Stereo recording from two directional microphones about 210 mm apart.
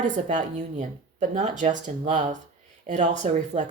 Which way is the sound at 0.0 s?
35° right (ahead or behind).